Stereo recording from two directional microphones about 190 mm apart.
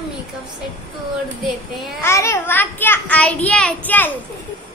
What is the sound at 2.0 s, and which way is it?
A woman's voice, 15° left (ahead or behind).